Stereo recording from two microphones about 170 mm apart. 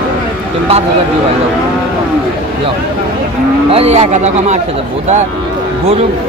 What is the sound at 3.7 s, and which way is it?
Speech, 35° right (ahead or behind).